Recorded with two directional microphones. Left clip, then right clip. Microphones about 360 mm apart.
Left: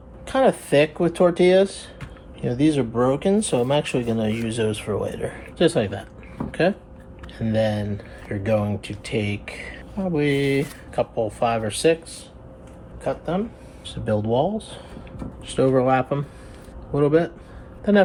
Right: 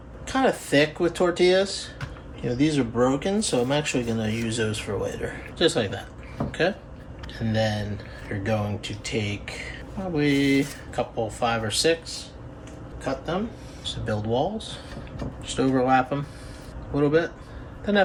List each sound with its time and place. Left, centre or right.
0.3 s speech: left
6.5 s a sound: centre
7.3 s speech: left
13.8 s speech: centre